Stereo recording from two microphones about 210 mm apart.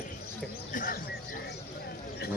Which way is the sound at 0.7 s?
40° left (ahead or behind).